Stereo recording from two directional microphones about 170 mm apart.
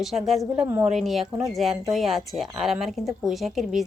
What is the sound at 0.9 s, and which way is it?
Speech, centre (ahead or behind).